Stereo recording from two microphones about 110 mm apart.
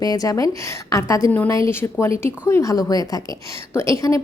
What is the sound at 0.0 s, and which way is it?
A woman's voice, 35° left (ahead or behind).